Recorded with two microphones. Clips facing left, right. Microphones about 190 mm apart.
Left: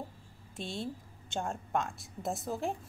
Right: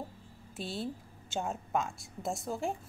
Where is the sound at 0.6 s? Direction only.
5° right (ahead or behind).